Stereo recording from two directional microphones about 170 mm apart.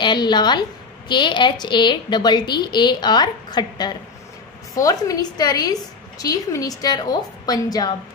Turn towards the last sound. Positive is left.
turn(degrees=25)  # may be behind; listen again after turning